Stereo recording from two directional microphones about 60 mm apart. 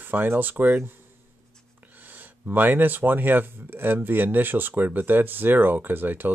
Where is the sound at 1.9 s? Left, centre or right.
Right.